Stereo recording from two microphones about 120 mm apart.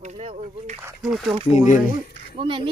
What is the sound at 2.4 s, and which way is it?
Speech, 45° right (ahead or behind).